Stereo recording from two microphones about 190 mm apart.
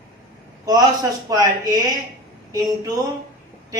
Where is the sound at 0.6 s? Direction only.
20° right (ahead or behind).